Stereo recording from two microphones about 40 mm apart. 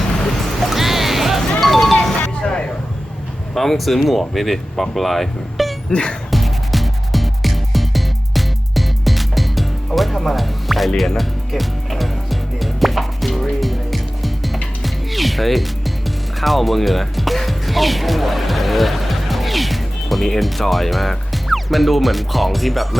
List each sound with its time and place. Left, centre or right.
0.6 s music: centre
2.4 s a sound: left
3.5 s speech: centre
5.9 s speech: left
6.3 s music: centre